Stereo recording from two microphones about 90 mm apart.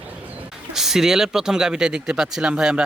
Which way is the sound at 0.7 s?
5° right (ahead or behind).